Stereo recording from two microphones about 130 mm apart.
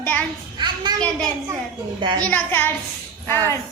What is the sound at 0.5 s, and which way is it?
Speech, 35° right (ahead or behind).